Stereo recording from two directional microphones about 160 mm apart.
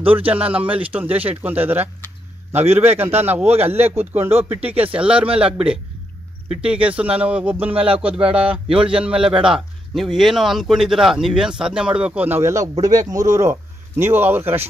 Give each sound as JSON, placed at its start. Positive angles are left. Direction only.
{"t": 0.0, "sound": "a man's voice", "side_deg": -10}
{"t": 3.7, "sound": "speech", "side_deg": -40}
{"t": 4.1, "sound": "a man's voice", "side_deg": -15}